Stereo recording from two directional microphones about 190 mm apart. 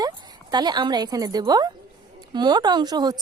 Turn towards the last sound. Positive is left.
turn(degrees=-20)  # may be behind; listen again after turning